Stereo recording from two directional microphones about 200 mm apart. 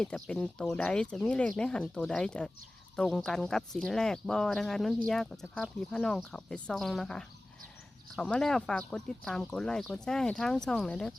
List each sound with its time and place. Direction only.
0.0 s speech: 5° left (ahead or behind)